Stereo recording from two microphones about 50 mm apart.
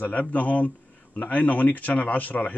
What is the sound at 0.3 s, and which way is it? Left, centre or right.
Speech, left.